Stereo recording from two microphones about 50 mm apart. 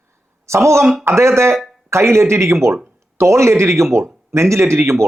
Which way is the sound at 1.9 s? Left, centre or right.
Right.